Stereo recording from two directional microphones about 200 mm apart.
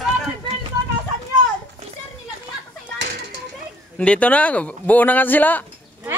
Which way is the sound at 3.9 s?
5° left (ahead or behind).